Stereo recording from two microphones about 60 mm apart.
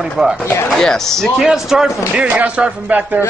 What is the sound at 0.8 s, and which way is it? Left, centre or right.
Speech, centre.